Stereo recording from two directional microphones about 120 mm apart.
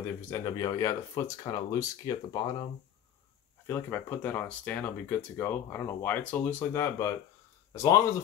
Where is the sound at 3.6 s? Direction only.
20° left (ahead or behind).